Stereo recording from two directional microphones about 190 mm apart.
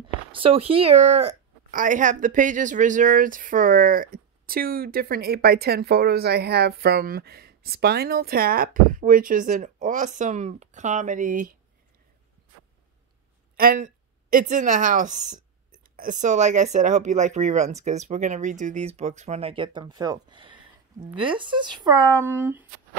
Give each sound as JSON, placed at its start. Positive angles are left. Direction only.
{"t": 0.0, "sound": "speech", "side_deg": -30}
{"t": 13.6, "sound": "speech", "side_deg": -45}